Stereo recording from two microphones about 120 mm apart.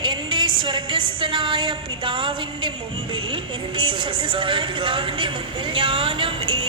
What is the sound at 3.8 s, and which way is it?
Speech, 45° right (ahead or behind).